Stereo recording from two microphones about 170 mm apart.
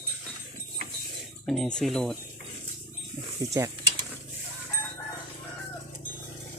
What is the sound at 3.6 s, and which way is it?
Stir, 15° right (ahead or behind).